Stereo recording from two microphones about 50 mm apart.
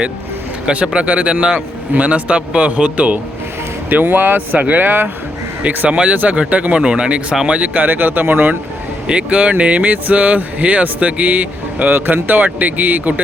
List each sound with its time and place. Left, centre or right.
0.6 s speech: right
1.9 s speech: right
3.8 s speech: right
5.9 s speech: right
9.0 s speech: right